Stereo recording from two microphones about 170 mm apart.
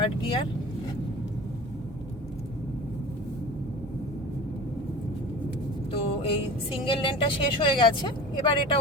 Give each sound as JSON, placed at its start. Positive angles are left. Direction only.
{"t": 0.0, "sound": "speech", "side_deg": 30}
{"t": 5.9, "sound": "speech", "side_deg": 35}